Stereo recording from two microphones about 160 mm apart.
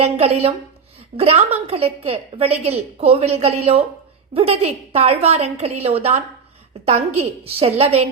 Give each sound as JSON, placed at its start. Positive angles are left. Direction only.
{"t": 0.0, "sound": "a woman's voice", "side_deg": -40}